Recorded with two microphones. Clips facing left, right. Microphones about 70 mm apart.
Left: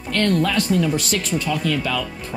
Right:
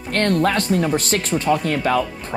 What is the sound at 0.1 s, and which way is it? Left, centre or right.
Speech, right.